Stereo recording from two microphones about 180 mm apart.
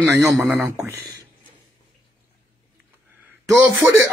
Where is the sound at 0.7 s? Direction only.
20° right (ahead or behind).